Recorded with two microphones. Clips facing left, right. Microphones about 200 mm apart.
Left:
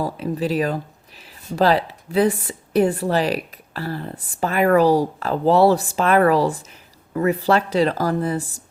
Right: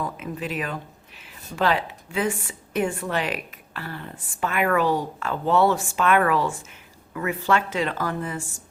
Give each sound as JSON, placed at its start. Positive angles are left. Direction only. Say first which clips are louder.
{"t": 0.0, "sound": "speech", "louder": "left 7 dB", "side_deg": 35}